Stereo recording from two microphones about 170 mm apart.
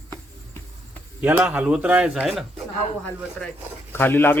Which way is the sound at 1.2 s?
10° right (ahead or behind).